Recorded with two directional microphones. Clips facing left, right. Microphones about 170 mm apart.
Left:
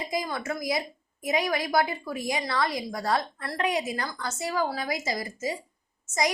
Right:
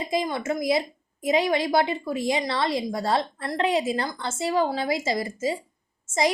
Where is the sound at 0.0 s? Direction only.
25° right (ahead or behind).